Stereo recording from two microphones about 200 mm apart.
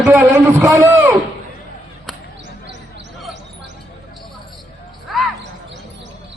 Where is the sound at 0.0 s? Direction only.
5° right (ahead or behind).